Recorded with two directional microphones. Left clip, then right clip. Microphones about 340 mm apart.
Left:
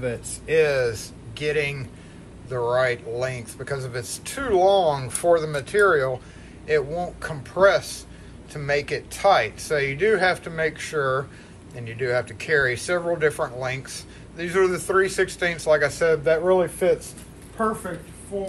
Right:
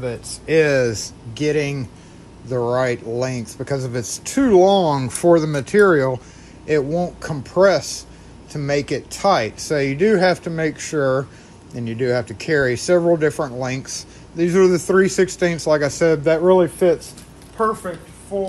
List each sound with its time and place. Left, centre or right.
0.0 s speech: right